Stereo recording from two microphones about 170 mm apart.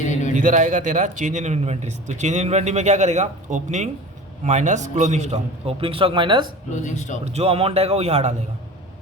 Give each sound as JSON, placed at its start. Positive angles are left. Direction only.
{"t": 0.0, "sound": "a sound", "side_deg": 45}
{"t": 0.3, "sound": "a man's voice", "side_deg": -50}
{"t": 6.8, "sound": "a man's voice", "side_deg": 45}
{"t": 7.3, "sound": "a man's voice", "side_deg": -35}